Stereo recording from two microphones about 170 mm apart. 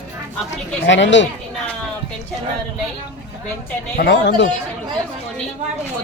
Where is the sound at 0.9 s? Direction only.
90° left.